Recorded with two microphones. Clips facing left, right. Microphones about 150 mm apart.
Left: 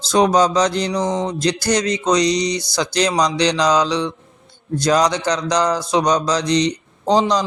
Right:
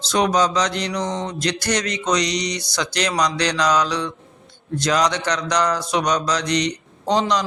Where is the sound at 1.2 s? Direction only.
30° left (ahead or behind).